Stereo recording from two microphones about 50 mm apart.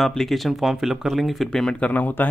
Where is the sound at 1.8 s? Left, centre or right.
Left.